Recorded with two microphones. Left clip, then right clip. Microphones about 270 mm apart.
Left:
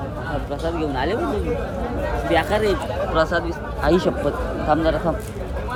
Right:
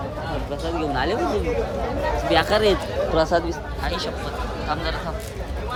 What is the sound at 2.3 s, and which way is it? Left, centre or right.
Speech, centre.